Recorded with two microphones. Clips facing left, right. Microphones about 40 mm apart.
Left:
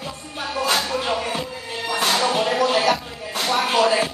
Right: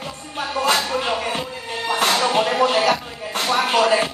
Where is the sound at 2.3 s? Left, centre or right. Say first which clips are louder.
Right 2 dB; right.